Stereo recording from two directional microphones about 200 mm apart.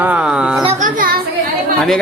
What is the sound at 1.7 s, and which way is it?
Speech, centre (ahead or behind).